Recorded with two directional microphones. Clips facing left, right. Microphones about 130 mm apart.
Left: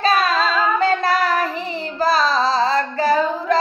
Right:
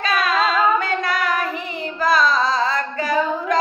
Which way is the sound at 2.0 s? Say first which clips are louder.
Even; 30° left (ahead or behind).